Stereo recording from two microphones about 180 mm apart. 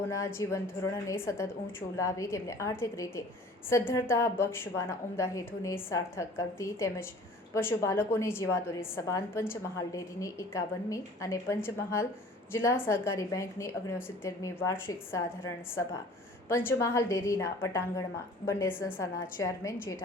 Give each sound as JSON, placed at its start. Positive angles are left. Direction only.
{"t": 0.1, "sound": "a woman's voice", "side_deg": 15}
{"t": 16.5, "sound": "a woman's voice", "side_deg": 15}